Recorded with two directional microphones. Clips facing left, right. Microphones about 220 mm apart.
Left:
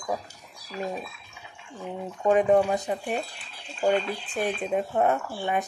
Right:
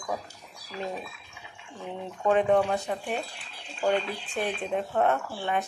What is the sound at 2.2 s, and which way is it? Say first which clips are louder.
Speech: left 2 dB; 10° left (ahead or behind).